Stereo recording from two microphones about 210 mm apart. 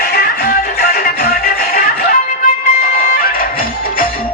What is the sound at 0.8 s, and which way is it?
Music, 45° left (ahead or behind).